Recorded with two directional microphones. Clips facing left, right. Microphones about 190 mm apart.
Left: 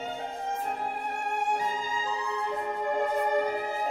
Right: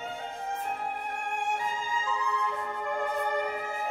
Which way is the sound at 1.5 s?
35° left (ahead or behind).